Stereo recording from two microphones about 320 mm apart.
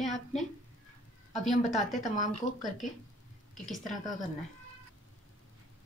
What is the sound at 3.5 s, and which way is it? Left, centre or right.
Speech, centre.